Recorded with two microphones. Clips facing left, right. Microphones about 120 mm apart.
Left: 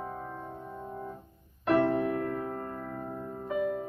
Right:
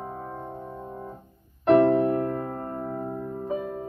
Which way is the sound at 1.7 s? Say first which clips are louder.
Right 6 dB; 35° right (ahead or behind).